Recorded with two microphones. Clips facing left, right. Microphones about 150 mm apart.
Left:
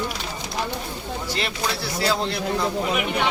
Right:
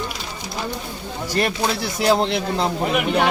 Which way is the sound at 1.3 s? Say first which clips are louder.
Right 8 dB; 50° right (ahead or behind).